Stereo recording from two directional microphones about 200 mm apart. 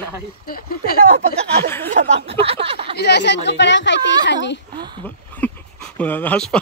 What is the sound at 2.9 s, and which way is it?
Speech, 55° left (ahead or behind).